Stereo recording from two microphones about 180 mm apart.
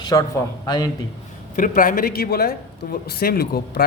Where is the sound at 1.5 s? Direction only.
50° left (ahead or behind).